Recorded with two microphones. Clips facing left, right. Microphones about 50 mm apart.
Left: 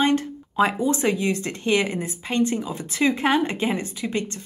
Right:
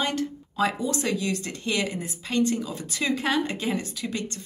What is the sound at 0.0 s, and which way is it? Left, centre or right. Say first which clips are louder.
Speech: left 6 dB; left.